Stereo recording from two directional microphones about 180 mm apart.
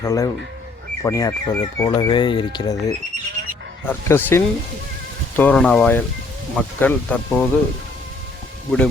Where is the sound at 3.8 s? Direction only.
15° left (ahead or behind).